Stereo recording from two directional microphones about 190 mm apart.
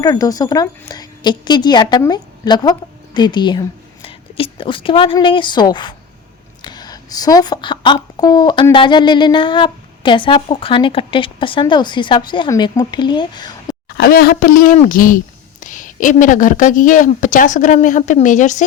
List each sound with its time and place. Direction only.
0.0 s a woman's voice: 20° left (ahead or behind)
13.8 s a woman's voice: 55° left (ahead or behind)